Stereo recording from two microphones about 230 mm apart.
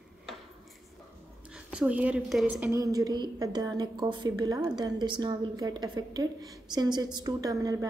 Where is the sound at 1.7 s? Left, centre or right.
Centre.